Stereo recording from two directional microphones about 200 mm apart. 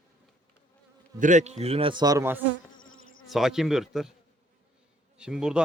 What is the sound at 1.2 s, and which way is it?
A man's voice, 40° right (ahead or behind).